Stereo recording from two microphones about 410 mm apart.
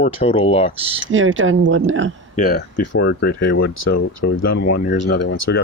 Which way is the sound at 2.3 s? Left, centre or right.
Left.